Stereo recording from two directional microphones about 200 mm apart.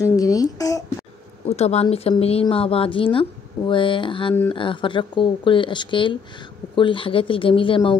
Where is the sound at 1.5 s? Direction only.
30° left (ahead or behind).